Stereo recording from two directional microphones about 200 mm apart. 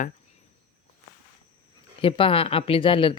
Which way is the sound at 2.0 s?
25° left (ahead or behind).